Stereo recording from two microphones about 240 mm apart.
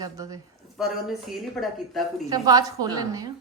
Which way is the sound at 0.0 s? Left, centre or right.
Centre.